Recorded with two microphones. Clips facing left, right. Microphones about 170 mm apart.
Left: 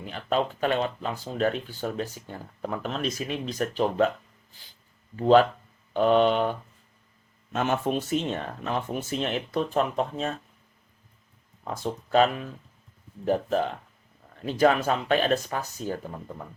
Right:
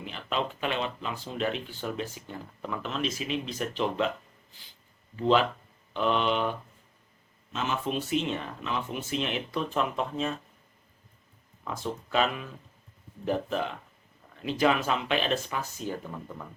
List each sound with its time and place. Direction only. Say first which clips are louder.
0.0 s speech: left 5 dB; 45° left (ahead or behind)
5.2 s speech: left 6 dB; 45° left (ahead or behind)
7.5 s speech: left 5 dB; 55° left (ahead or behind)
11.6 s speech: left 3 dB; 40° left (ahead or behind)